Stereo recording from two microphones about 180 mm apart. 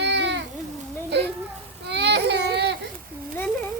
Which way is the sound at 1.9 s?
70° right (ahead or behind).